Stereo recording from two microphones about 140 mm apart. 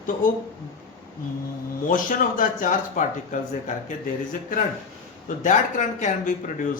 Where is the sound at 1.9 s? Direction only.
75° left (ahead or behind).